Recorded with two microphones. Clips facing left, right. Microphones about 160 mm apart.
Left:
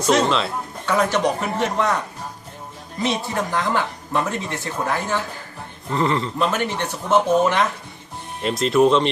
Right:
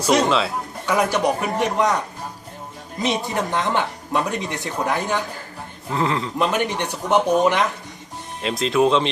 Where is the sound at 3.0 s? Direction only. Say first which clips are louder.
Even; 20° right (ahead or behind).